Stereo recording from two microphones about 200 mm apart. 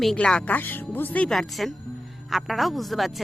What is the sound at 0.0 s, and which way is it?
A woman's voice, 5° left (ahead or behind).